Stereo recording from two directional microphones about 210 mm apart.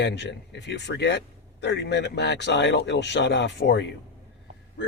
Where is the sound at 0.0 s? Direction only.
55° left (ahead or behind).